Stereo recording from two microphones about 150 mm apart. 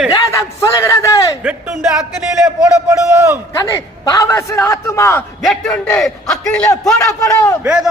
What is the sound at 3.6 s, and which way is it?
A man's voice, 25° left (ahead or behind).